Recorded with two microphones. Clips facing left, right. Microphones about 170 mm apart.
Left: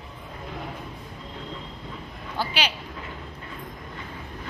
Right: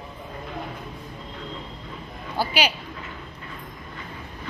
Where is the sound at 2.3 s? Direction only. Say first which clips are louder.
Right 4 dB; 10° right (ahead or behind).